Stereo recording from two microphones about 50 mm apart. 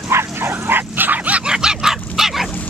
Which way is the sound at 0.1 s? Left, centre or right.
Right.